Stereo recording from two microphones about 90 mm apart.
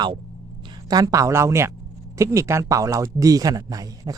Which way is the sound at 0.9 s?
50° right (ahead or behind).